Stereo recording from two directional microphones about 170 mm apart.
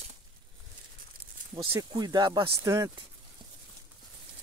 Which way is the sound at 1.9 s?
25° right (ahead or behind).